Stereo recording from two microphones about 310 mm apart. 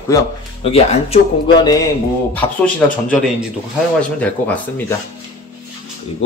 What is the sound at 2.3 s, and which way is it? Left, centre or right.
Speech, centre.